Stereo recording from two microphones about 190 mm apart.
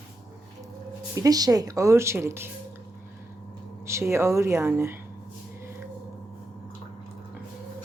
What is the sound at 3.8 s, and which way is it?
Speech, 15° right (ahead or behind).